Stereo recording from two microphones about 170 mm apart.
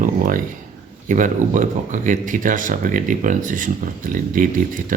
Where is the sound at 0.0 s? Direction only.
55° right (ahead or behind).